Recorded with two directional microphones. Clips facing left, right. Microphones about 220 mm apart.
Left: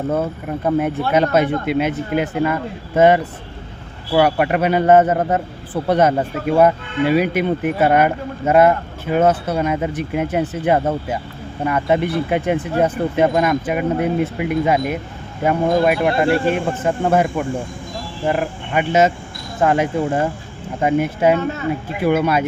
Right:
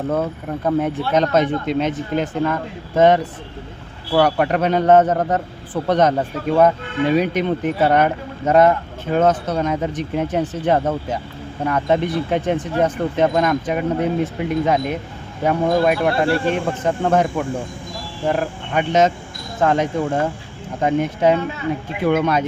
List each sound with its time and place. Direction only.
0.1 s a man's voice: 5° left (ahead or behind)
21.3 s speech: 50° left (ahead or behind)
22.0 s a man's voice: 5° left (ahead or behind)